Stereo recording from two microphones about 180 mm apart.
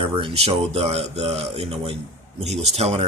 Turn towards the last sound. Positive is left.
turn(degrees=-35)  # may be behind; listen again after turning